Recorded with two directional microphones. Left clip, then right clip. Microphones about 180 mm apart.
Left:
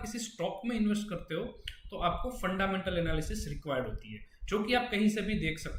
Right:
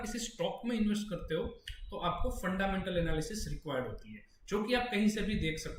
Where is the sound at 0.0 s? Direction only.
Centre (ahead or behind).